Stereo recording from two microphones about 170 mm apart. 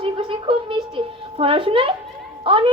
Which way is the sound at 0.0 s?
30° right (ahead or behind).